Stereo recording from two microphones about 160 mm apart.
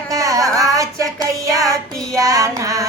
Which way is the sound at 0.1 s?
20° right (ahead or behind).